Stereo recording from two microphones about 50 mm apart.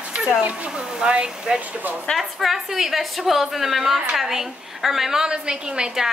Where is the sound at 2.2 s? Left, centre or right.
Centre.